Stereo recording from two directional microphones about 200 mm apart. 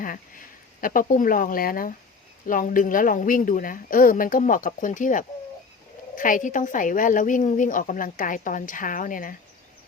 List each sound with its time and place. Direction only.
0.0 s a woman's voice: 45° left (ahead or behind)